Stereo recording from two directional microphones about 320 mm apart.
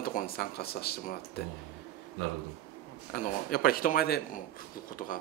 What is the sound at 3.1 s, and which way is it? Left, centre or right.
Speech, left.